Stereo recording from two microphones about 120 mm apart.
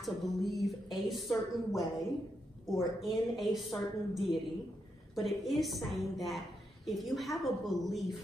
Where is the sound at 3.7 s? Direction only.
30° left (ahead or behind).